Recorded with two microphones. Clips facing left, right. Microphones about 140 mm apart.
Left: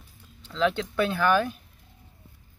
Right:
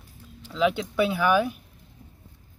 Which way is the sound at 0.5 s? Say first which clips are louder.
Right 1 dB; 10° right (ahead or behind).